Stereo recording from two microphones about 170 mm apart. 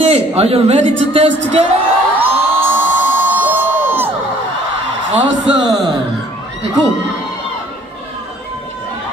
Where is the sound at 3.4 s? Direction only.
10° right (ahead or behind).